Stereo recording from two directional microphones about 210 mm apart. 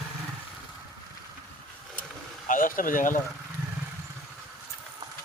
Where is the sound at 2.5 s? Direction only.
40° left (ahead or behind).